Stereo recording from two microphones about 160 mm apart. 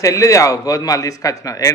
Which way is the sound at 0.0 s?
20° left (ahead or behind).